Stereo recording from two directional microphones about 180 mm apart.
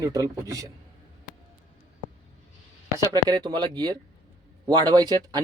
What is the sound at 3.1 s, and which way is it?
Speech, 25° right (ahead or behind).